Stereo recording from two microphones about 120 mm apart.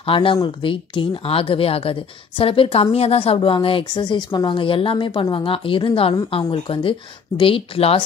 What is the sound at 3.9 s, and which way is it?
Speech, 35° left (ahead or behind).